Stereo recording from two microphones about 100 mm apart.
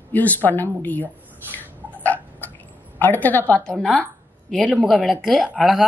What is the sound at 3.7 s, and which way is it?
A man's voice, centre (ahead or behind).